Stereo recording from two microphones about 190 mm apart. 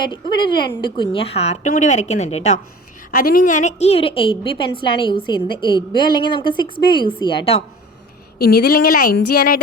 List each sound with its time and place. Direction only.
0.0 s a woman's voice: 25° left (ahead or behind)
3.1 s a woman's voice: 50° left (ahead or behind); by 7.6 s 30° left (ahead or behind)
8.4 s a sound: 55° left (ahead or behind)